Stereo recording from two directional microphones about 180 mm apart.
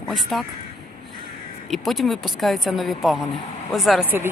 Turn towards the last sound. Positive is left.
turn(degrees=0)  # may be behind; listen again after turning